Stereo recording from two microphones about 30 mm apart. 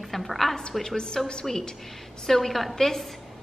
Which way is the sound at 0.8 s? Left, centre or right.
Left.